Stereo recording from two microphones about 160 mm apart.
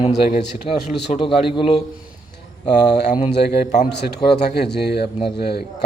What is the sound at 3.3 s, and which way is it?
Speech, 90° left.